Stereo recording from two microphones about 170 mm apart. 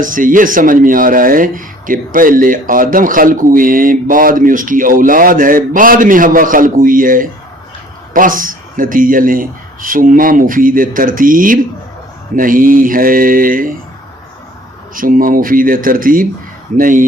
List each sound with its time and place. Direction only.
0.0 s speech: 55° right (ahead or behind)
14.9 s speech: 55° right (ahead or behind)